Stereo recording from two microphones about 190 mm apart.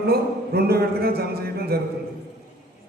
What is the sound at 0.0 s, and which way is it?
A man's voice, 55° right (ahead or behind).